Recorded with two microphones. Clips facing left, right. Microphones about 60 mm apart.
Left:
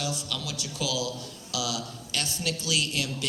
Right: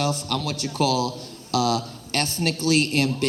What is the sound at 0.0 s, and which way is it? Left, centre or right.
A man's voice, right.